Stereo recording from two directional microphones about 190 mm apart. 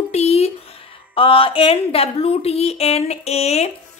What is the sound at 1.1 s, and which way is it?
A woman's voice, 30° left (ahead or behind).